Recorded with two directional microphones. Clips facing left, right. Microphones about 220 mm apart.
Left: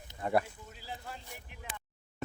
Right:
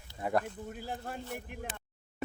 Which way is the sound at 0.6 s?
55° right (ahead or behind).